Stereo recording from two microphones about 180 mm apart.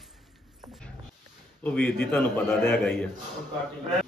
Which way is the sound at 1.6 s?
10° left (ahead or behind).